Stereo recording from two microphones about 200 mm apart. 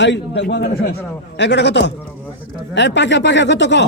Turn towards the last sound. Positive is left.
turn(degrees=60)  # may be behind; listen again after turning